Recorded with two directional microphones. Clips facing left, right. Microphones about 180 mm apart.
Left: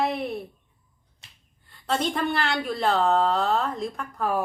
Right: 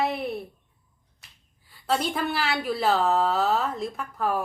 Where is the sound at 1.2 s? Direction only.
25° left (ahead or behind).